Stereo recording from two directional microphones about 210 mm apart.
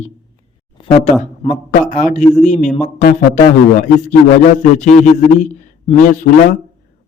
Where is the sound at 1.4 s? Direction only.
35° left (ahead or behind).